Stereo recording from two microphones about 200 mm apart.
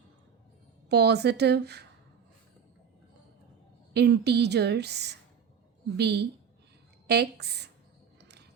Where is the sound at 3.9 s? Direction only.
55° right (ahead or behind).